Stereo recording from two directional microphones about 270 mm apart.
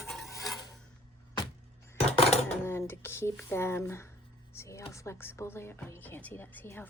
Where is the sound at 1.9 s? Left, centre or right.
Left.